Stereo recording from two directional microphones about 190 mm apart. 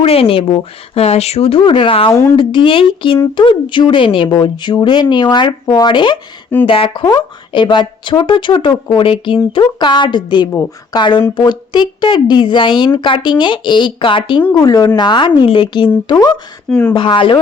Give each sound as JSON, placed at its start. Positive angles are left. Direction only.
{"t": 0.0, "sound": "speech", "side_deg": 30}
{"t": 16.6, "sound": "speech", "side_deg": 5}
{"t": 16.9, "sound": "speech", "side_deg": 25}